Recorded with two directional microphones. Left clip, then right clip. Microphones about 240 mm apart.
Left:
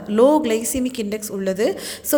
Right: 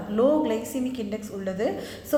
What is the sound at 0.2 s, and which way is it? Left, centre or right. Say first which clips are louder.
A woman's voice: left 7 dB; left.